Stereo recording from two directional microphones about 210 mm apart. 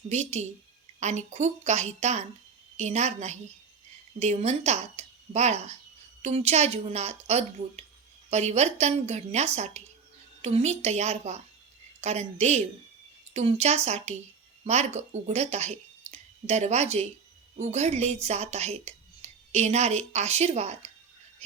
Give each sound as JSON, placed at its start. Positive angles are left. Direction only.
{"t": 0.1, "sound": "speech", "side_deg": -30}